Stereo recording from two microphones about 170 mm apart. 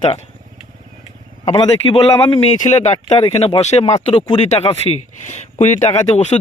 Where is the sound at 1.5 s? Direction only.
30° left (ahead or behind).